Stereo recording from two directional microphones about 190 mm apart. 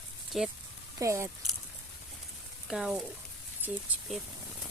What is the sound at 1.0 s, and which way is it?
Speech, 15° right (ahead or behind).